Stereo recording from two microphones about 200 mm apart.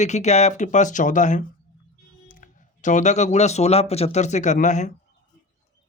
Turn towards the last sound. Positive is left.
turn(degrees=35)  # may be behind; listen again after turning